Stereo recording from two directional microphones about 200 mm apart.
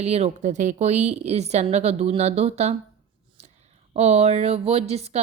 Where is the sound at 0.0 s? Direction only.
30° right (ahead or behind).